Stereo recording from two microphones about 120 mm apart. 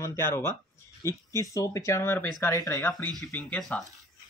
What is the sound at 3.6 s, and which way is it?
Speech, centre (ahead or behind).